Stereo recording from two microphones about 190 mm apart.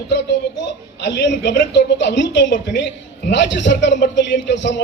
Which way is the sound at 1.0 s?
65° left (ahead or behind).